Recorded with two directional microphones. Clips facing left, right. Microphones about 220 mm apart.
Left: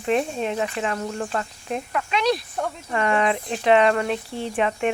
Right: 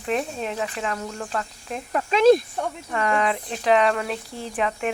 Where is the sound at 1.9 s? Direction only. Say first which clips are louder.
Right 8 dB; 40° right (ahead or behind).